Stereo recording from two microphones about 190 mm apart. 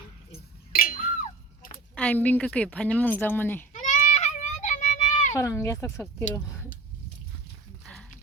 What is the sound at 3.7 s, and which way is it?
Children playing, 40° left (ahead or behind).